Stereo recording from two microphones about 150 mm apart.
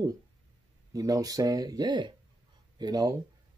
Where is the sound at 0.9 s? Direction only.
25° right (ahead or behind).